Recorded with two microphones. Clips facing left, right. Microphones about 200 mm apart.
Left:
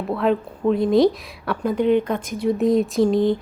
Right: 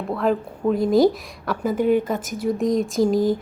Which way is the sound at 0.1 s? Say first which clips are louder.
Left 1 dB; centre (ahead or behind).